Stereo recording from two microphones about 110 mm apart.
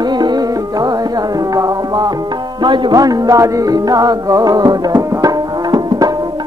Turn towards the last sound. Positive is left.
turn(degrees=-35)  # may be behind; listen again after turning